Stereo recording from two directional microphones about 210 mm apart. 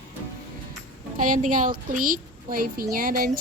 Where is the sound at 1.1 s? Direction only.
40° right (ahead or behind).